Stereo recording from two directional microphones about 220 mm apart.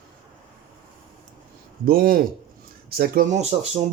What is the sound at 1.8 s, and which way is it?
Speech, 40° right (ahead or behind).